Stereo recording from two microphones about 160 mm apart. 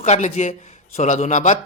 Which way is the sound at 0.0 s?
45° left (ahead or behind).